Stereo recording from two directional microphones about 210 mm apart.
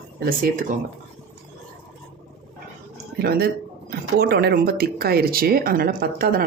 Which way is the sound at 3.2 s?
45° right (ahead or behind).